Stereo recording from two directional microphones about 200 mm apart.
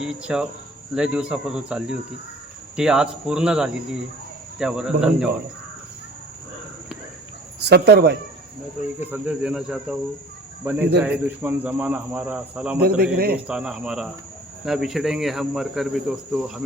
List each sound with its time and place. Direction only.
0.0 s speech: 5° right (ahead or behind)
7.6 s speech: 55° right (ahead or behind)
9.0 s speech: 10° right (ahead or behind)
12.8 s speech: 50° right (ahead or behind)
13.5 s speech: 5° right (ahead or behind)